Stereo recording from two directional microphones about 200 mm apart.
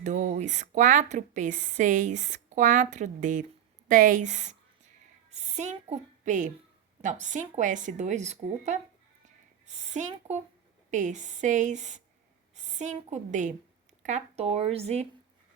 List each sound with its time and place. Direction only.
0.0 s a woman's voice: 40° right (ahead or behind)